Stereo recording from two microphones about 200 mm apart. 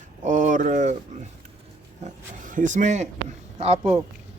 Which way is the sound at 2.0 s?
40° right (ahead or behind).